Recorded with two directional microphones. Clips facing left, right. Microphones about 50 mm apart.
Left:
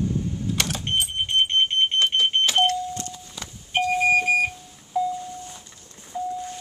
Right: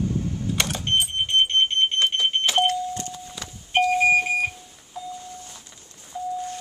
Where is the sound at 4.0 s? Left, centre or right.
Centre.